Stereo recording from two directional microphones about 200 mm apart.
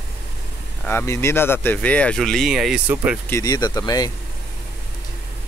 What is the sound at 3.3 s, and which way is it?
Speech, 15° left (ahead or behind).